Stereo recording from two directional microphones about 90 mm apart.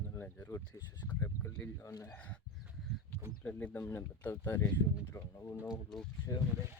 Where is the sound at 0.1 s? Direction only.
25° left (ahead or behind).